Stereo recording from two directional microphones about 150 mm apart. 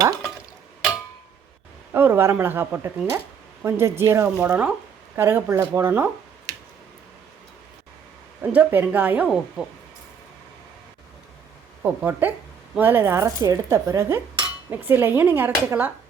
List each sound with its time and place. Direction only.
1.9 s speech: 15° right (ahead or behind)
8.4 s speech: 10° right (ahead or behind)
11.8 s speech: 10° right (ahead or behind)